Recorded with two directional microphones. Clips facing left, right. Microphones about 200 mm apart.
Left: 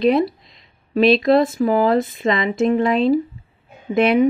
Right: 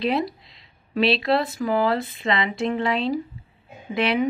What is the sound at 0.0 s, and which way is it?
Speech, 45° left (ahead or behind).